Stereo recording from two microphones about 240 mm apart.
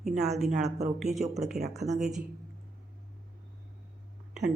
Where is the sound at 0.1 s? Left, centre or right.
Right.